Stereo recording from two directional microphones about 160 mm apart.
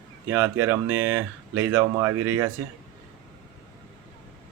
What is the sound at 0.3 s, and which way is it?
Speech, 15° right (ahead or behind).